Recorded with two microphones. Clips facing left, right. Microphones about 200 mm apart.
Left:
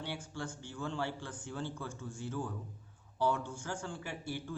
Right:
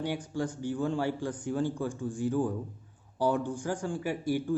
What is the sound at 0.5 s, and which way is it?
Speech, 15° right (ahead or behind).